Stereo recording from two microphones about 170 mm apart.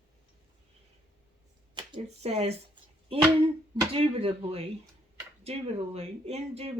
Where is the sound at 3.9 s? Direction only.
35° right (ahead or behind).